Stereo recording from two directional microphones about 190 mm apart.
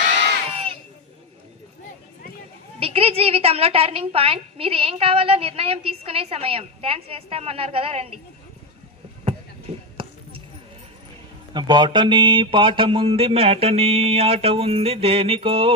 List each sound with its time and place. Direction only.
0.5 s crowd: 30° right (ahead or behind)
2.8 s a woman's voice: 30° right (ahead or behind)
11.5 s speech: 25° right (ahead or behind)